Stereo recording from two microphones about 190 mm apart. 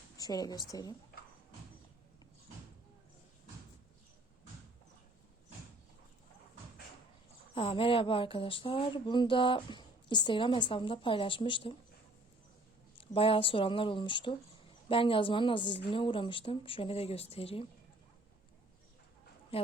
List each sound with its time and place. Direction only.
0.2 s speech: 20° left (ahead or behind)
7.5 s speech: 30° left (ahead or behind)
13.0 s speech: 30° left (ahead or behind)
19.5 s speech: 30° left (ahead or behind)